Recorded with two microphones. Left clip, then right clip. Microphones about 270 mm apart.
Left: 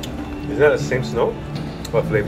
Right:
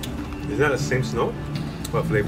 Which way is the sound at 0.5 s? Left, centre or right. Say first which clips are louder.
Left 6 dB; centre.